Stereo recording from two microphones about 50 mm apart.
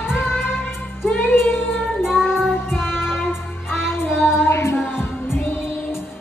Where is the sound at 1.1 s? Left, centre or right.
Left.